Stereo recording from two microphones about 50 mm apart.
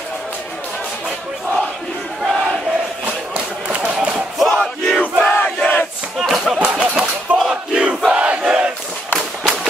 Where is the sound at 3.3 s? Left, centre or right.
Right.